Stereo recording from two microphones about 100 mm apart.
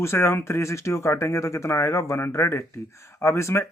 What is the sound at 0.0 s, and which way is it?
Speech, 25° left (ahead or behind).